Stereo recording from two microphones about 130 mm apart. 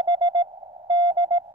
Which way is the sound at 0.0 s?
30° right (ahead or behind).